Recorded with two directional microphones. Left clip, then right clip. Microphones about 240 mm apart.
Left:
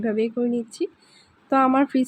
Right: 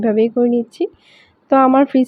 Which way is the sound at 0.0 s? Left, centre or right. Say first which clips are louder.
Right 9 dB; centre.